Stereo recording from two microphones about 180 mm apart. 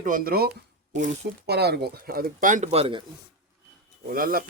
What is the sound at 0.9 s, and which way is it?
Speech, 40° right (ahead or behind).